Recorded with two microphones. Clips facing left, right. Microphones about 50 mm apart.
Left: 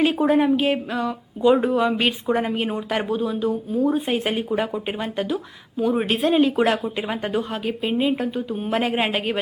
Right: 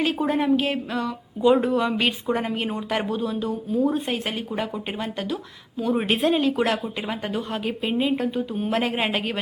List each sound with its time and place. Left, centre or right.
0.0 s speech: centre
4.0 s speech: centre
7.5 s speech: centre